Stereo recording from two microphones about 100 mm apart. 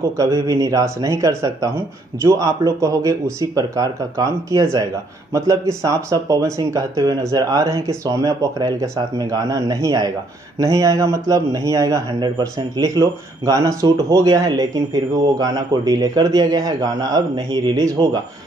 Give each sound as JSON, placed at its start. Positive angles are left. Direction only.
{"t": 0.2, "sound": "speech", "side_deg": -35}